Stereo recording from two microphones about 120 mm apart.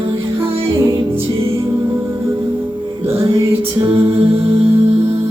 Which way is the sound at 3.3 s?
45° right (ahead or behind).